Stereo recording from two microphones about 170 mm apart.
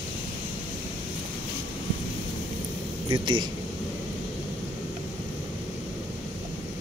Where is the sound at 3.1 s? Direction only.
25° right (ahead or behind).